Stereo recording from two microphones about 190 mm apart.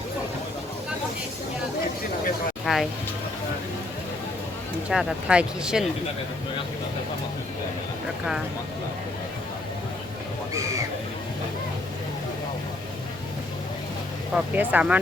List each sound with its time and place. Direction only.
2.7 s speech: centre (ahead or behind)
4.9 s speech: 5° right (ahead or behind)
10.5 s a sound: 15° right (ahead or behind)
14.3 s speech: 10° right (ahead or behind)